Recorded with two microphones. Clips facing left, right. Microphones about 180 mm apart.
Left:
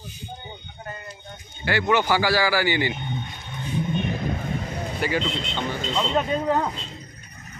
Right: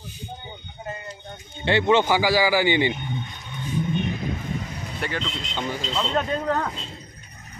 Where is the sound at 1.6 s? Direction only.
25° right (ahead or behind).